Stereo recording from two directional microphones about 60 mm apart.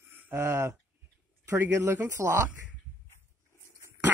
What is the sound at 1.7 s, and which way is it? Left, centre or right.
Speech, right.